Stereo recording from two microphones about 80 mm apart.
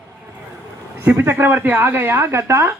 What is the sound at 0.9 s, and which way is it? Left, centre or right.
Speech, right.